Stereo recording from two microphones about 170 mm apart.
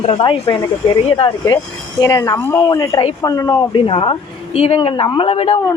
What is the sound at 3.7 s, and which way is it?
A woman's voice, 30° left (ahead or behind).